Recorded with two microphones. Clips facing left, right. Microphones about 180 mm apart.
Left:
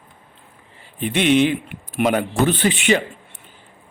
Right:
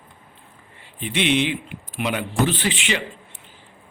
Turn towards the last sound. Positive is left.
turn(degrees=50)  # may be behind; listen again after turning